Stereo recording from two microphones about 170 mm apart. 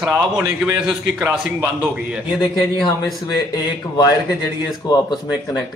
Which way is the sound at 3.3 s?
20° left (ahead or behind).